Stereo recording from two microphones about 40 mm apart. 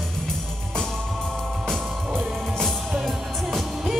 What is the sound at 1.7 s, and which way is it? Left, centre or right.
Music, centre.